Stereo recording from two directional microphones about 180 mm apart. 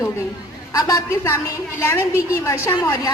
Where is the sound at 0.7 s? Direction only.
20° left (ahead or behind).